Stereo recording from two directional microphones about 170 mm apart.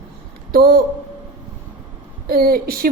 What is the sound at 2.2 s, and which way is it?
Speech, 60° right (ahead or behind).